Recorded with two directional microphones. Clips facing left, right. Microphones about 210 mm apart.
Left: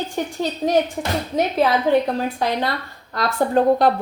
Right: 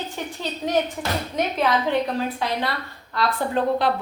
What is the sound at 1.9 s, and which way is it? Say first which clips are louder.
Speech: left 5 dB; 40° left (ahead or behind).